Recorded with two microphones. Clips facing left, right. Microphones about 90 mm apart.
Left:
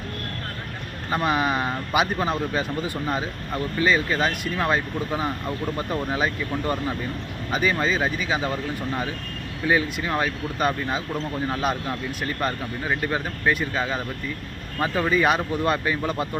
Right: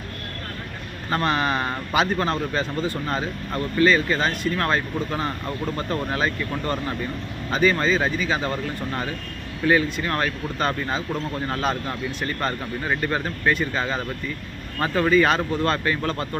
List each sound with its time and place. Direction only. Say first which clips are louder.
1.1 s speech: even; 10° left (ahead or behind)